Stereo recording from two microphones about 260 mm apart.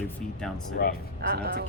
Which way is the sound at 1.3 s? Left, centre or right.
Right.